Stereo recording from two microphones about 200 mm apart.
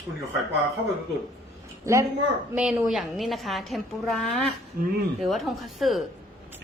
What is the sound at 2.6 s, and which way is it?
A woman's voice, 5° right (ahead or behind).